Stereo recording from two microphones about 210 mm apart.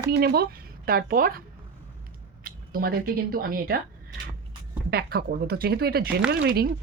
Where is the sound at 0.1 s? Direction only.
50° right (ahead or behind).